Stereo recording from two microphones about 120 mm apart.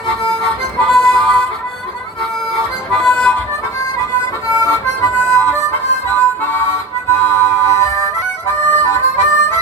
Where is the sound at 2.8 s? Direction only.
5° left (ahead or behind).